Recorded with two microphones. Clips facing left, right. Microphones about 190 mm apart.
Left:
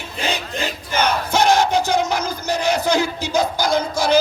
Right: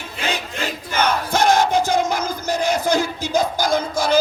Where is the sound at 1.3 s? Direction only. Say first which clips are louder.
Left 1 dB; 50° right (ahead or behind).